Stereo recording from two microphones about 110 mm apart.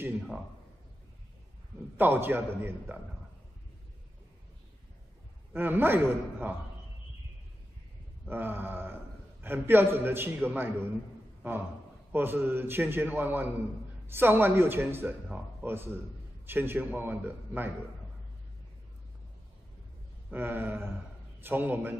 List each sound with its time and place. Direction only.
2.0 s a man's voice: 20° right (ahead or behind)
5.5 s a man's voice: 15° right (ahead or behind)
8.3 s a man's voice: 20° right (ahead or behind)
20.2 s a man's voice: 15° right (ahead or behind)